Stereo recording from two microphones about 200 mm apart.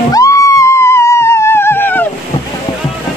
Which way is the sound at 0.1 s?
15° left (ahead or behind).